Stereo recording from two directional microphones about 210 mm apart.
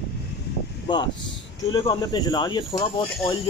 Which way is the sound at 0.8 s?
20° left (ahead or behind).